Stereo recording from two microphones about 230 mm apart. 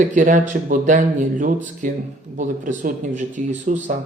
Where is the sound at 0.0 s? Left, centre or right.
Right.